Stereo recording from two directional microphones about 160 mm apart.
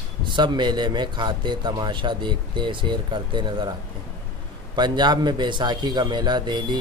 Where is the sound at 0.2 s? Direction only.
30° right (ahead or behind).